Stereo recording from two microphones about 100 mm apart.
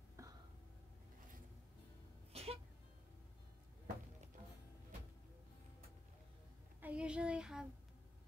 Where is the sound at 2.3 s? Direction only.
90° right.